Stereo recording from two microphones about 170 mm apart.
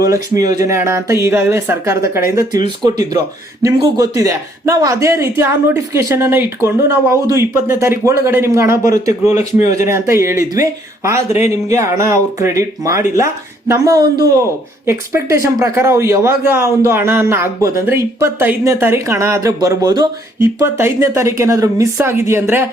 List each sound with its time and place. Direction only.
0.0 s speech: 20° right (ahead or behind)